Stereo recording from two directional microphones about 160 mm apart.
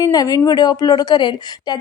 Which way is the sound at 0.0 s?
20° left (ahead or behind).